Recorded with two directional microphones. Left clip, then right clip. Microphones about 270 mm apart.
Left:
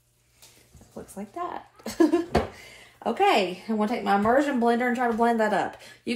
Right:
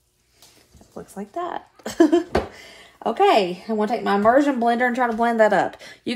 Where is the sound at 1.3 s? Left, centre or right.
Right.